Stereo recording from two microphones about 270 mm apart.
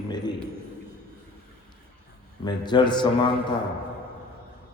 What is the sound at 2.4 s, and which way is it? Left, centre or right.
Speech, centre.